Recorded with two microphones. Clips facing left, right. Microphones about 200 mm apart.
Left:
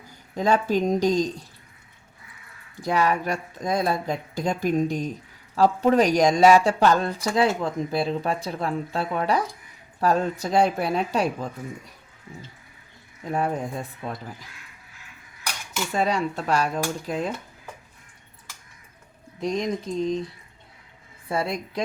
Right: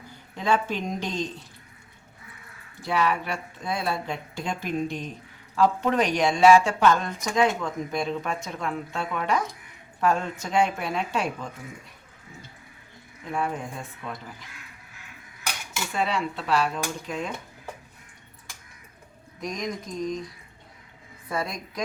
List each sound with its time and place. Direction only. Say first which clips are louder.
0.3 s speech: left 4 dB; 40° left (ahead or behind)
2.8 s speech: left 3 dB; 40° left (ahead or behind)
13.2 s speech: left 4 dB; 40° left (ahead or behind)
16.0 s speech: left 3 dB; 40° left (ahead or behind)
19.4 s a sound: left 6 dB; 30° left (ahead or behind)